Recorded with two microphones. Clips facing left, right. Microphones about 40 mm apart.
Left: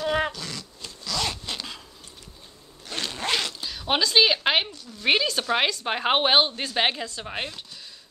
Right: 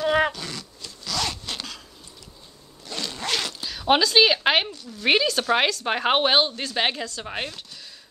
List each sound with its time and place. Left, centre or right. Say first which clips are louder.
0.0 s a sound: right 4 dB; centre
1.0 s zipper: right 1 dB; centre
2.9 s zipper: left 1 dB; left
3.3 s zipper: left 1 dB; centre
4.0 s a woman's voice: left 2 dB; centre